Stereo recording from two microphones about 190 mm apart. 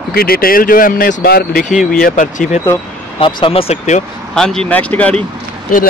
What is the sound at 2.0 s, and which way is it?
Speech, 45° left (ahead or behind).